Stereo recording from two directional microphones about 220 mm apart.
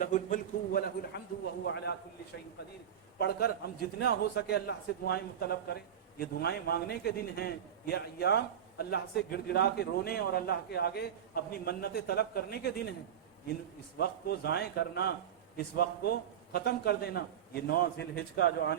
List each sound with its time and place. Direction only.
0.0 s a sound: 35° left (ahead or behind)
1.1 s a man's voice: 50° left (ahead or behind)
3.2 s a man's voice: 45° left (ahead or behind)
14.0 s a man's voice: 45° left (ahead or behind)